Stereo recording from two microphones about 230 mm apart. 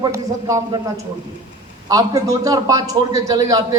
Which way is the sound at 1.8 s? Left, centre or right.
Centre.